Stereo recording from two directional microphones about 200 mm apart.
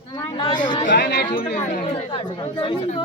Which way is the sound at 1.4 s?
45° left (ahead or behind).